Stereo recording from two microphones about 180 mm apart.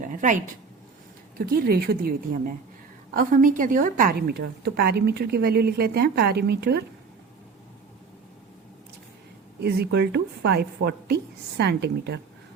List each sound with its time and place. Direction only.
0.0 s a sound: 45° right (ahead or behind)
1.4 s a woman's voice: 55° right (ahead or behind)
9.6 s a woman's voice: 65° right (ahead or behind)